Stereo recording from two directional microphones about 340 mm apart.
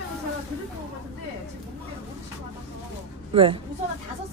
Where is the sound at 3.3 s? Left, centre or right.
Centre.